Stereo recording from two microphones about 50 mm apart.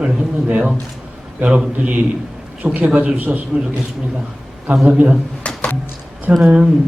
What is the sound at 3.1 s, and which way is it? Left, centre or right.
Speech, right.